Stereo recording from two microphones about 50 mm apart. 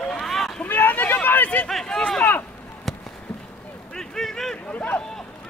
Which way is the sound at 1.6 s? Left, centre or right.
Centre.